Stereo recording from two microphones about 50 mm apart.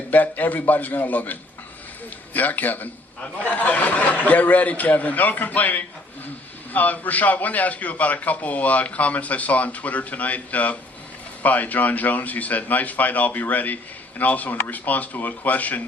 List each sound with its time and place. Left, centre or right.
0.1 s a man's voice: left